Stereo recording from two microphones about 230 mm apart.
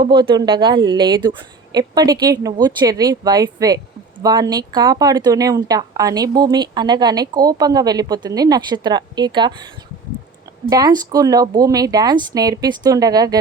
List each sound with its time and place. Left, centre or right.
0.0 s speech: centre
10.7 s speech: centre